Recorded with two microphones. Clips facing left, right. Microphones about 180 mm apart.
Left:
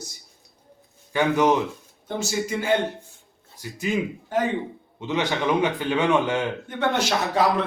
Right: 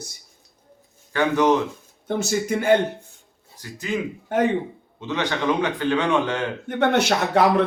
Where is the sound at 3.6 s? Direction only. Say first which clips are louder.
Left 2 dB; 10° left (ahead or behind).